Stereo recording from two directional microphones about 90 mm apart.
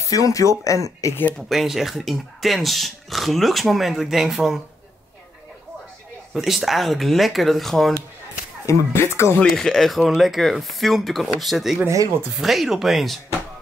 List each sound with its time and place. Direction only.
0.0 s speech: 40° left (ahead or behind)
1.5 s speech: centre (ahead or behind)
6.3 s speech: 5° right (ahead or behind)
8.6 s speech: 30° left (ahead or behind)
9.4 s speech: 5° left (ahead or behind)